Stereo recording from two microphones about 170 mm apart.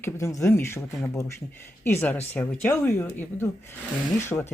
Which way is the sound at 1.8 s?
10° left (ahead or behind).